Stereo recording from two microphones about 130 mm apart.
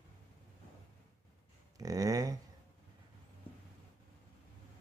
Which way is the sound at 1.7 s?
30° right (ahead or behind).